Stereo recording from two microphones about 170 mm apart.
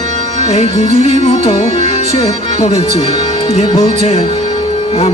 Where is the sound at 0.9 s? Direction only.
45° right (ahead or behind).